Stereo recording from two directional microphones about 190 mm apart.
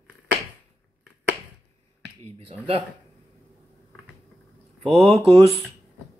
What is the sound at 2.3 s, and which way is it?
Speech, 30° right (ahead or behind).